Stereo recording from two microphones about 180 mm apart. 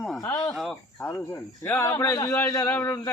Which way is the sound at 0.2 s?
20° left (ahead or behind).